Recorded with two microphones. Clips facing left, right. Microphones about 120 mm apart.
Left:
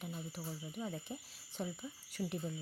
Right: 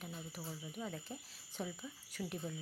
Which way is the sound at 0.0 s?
Centre (ahead or behind).